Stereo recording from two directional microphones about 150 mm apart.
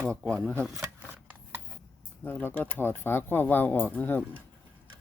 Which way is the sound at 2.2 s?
15° left (ahead or behind).